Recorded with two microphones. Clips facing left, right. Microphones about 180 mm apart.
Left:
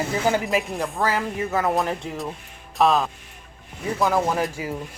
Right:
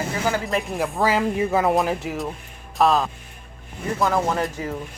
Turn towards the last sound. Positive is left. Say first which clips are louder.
# even
turn(degrees=10)  # may be behind; listen again after turning